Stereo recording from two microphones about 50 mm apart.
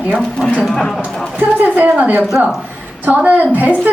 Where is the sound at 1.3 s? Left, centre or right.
Right.